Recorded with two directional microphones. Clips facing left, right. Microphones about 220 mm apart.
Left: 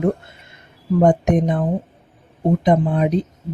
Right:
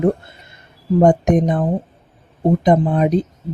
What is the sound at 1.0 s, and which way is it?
Speech, 45° right (ahead or behind).